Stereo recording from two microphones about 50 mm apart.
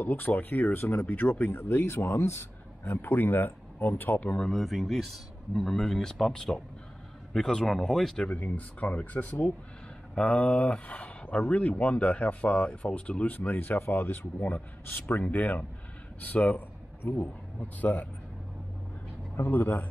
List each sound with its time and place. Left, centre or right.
0.0 s speech: left
4.5 s speech: centre
8.3 s speech: left
13.2 s speech: left
13.7 s speech: left
14.1 s speech: left
16.2 s a sound: left
17.2 s speech: left
19.5 s speech: left